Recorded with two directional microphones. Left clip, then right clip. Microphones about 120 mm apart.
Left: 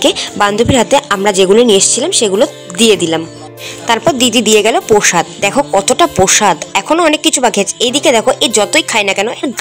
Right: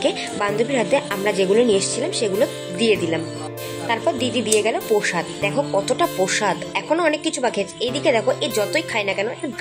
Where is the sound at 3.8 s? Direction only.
60° left (ahead or behind).